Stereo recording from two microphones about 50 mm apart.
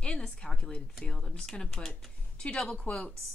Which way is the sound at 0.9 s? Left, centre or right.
Centre.